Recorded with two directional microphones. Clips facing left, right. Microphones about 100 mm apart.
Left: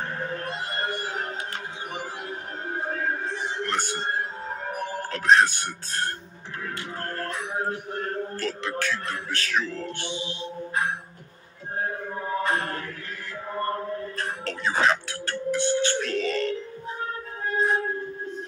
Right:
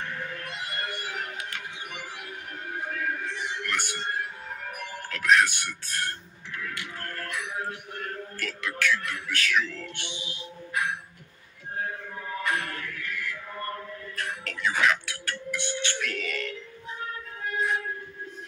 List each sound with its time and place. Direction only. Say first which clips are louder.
0.0 s music: left 5 dB; 35° left (ahead or behind)